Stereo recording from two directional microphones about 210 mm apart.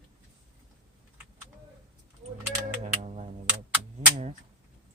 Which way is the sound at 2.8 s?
35° right (ahead or behind).